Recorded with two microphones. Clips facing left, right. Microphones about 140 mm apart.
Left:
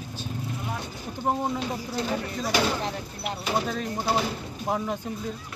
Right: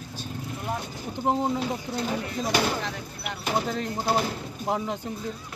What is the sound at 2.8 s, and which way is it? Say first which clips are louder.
Speech: left 3 dB; 35° left (ahead or behind).